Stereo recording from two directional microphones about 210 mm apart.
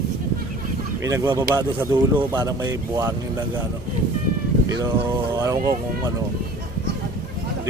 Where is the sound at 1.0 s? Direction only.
15° right (ahead or behind).